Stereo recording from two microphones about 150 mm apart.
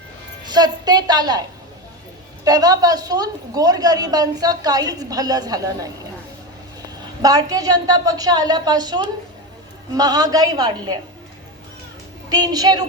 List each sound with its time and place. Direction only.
0.4 s a woman's voice: 25° right (ahead or behind)
7.2 s a woman's voice: 25° right (ahead or behind)
12.3 s a woman's voice: 25° right (ahead or behind)